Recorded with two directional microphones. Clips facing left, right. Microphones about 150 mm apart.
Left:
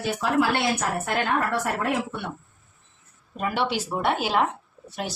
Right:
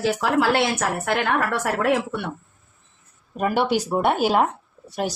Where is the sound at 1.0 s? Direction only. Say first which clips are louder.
Right 3 dB; 70° right (ahead or behind).